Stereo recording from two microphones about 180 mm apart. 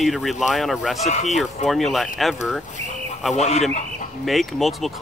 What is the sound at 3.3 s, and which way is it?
Speech, 40° left (ahead or behind).